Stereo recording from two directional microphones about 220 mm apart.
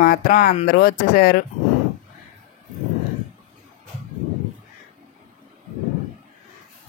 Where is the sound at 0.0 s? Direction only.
40° left (ahead or behind).